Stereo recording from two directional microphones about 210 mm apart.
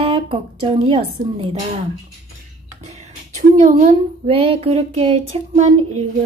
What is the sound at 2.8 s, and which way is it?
A woman's voice, 35° right (ahead or behind).